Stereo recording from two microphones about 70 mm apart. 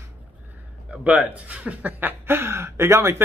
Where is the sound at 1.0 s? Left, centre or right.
Right.